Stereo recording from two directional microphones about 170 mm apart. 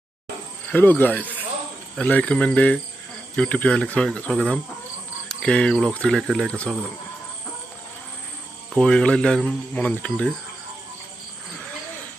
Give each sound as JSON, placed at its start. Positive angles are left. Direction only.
{"t": 0.7, "sound": "speech", "side_deg": 10}
{"t": 8.7, "sound": "speech", "side_deg": 5}